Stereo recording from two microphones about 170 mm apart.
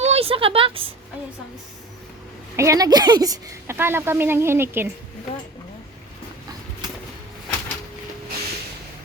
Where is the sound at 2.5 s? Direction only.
20° right (ahead or behind).